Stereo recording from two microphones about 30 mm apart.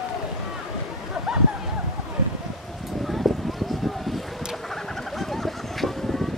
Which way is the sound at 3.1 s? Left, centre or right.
Centre.